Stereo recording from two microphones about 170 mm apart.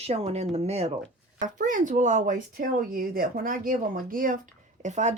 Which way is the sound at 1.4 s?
50° right (ahead or behind).